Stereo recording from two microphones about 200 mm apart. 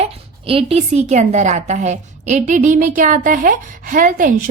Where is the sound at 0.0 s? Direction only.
30° right (ahead or behind).